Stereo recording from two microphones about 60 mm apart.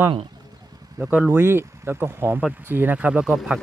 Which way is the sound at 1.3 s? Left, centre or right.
Right.